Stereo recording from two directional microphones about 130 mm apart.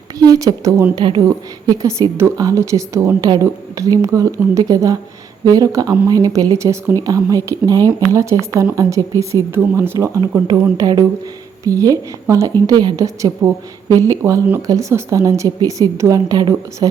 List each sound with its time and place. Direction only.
0.2 s a woman's voice: 25° right (ahead or behind)
10.2 s a woman's voice: 30° right (ahead or behind)